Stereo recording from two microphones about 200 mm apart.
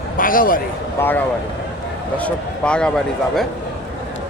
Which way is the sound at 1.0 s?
10° left (ahead or behind).